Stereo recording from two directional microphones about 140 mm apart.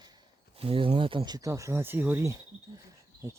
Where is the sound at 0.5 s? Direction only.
40° right (ahead or behind).